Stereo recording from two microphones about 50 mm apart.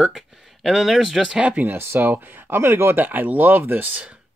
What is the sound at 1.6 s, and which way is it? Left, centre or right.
Speech, right.